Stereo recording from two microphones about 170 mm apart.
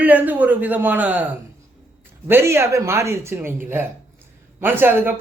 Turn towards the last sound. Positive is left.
turn(degrees=-10)  # may be behind; listen again after turning